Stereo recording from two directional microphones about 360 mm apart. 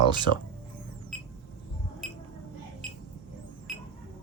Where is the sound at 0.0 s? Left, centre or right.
Centre.